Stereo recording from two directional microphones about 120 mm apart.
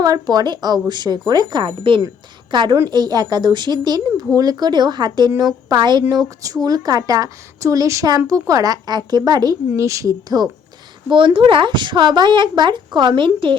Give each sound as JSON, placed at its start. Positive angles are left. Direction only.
{"t": 0.0, "sound": "a woman's voice", "side_deg": -30}
{"t": 11.3, "sound": "a woman's voice", "side_deg": -45}